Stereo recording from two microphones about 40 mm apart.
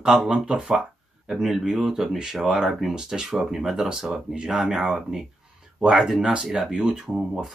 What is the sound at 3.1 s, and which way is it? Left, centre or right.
Speech, centre.